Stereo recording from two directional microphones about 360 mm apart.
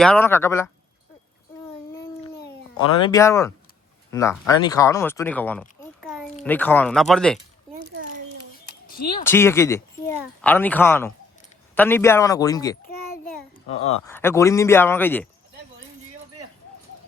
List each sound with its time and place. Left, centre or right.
0.0 s speech: centre
1.9 s a sound: centre
3.0 s speech: centre
9.2 s speech: centre
14.1 s speech: centre